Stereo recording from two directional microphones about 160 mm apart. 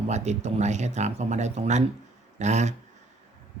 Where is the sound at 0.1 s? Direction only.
45° right (ahead or behind).